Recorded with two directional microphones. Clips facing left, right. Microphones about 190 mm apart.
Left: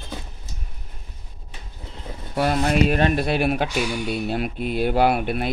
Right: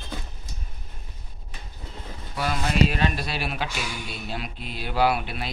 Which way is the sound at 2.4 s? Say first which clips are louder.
Left 4 dB; 50° left (ahead or behind).